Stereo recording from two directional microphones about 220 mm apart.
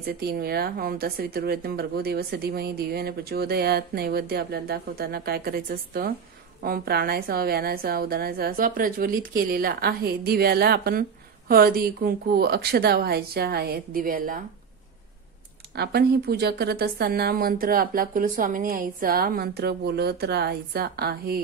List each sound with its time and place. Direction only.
0.0 s a woman's voice: 45° right (ahead or behind)
15.7 s a woman's voice: 45° right (ahead or behind)